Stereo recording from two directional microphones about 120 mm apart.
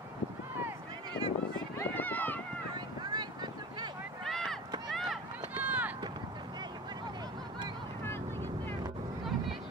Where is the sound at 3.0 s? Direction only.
35° right (ahead or behind).